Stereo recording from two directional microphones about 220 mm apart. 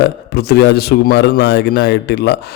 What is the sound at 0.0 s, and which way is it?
A man's voice, 45° left (ahead or behind).